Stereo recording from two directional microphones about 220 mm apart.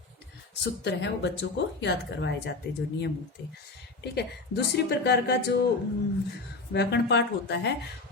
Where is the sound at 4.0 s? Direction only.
50° left (ahead or behind).